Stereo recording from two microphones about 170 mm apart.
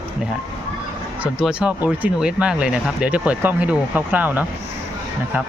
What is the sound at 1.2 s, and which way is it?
Speech, 5° right (ahead or behind).